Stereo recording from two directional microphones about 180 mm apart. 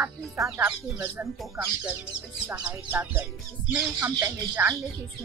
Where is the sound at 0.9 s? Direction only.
15° right (ahead or behind).